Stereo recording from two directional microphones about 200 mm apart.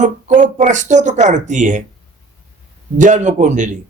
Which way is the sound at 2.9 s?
40° right (ahead or behind).